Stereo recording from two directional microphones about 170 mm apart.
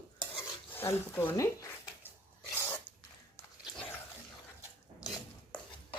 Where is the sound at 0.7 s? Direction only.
15° left (ahead or behind).